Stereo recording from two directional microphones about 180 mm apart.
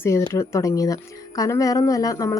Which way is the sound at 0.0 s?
15° left (ahead or behind).